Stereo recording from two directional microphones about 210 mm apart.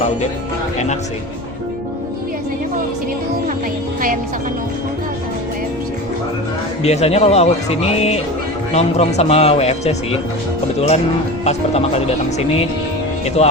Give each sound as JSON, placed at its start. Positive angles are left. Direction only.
{"t": 6.8, "sound": "speech", "side_deg": 30}
{"t": 13.2, "sound": "speech", "side_deg": 30}